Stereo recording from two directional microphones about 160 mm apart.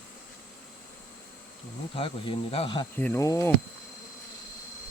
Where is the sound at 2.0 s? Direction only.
35° left (ahead or behind).